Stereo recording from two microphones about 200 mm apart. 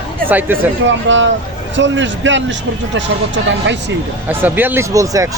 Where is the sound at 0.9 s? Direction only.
65° right (ahead or behind).